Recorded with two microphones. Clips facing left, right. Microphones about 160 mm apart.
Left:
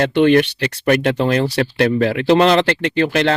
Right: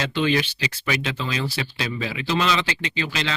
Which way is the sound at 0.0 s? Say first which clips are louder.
Left 10 dB; 65° left (ahead or behind).